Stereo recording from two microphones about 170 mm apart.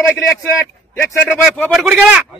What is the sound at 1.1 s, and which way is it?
Speech, 10° left (ahead or behind).